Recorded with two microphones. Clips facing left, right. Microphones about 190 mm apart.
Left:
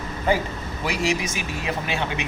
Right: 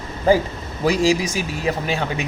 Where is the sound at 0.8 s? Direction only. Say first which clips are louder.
Right 7 dB; 35° right (ahead or behind).